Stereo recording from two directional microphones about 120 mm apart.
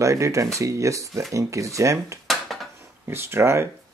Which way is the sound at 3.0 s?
20° right (ahead or behind).